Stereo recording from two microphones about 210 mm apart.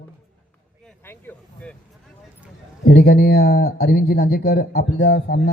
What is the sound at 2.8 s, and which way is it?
Speech, 50° left (ahead or behind).